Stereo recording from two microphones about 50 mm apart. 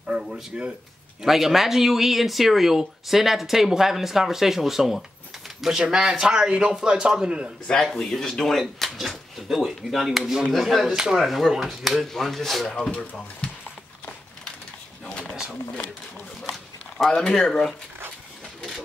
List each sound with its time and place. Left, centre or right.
0.5 s speech: centre
1.2 s speech: centre
7.8 s speech: centre
12.6 s speech: centre
13.0 s speech: left
17.1 s speech: centre